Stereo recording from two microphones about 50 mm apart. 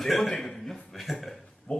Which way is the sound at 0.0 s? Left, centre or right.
Centre.